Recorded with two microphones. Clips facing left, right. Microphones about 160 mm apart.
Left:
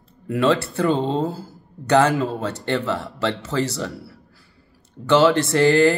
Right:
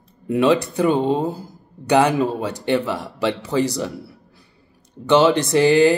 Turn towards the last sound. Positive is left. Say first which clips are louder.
# right 2 dB
turn(degrees=-15)  # may be behind; listen again after turning